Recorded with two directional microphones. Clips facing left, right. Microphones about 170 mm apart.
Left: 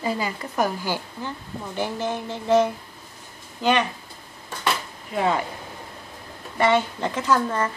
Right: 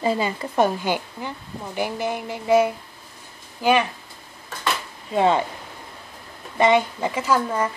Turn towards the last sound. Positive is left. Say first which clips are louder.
# even
turn(degrees=-10)  # may be behind; listen again after turning